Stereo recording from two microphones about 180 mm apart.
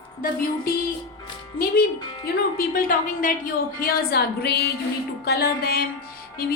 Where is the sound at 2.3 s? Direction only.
55° left (ahead or behind).